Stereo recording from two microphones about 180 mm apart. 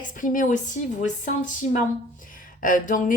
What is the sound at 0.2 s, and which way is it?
A woman's voice, 45° left (ahead or behind).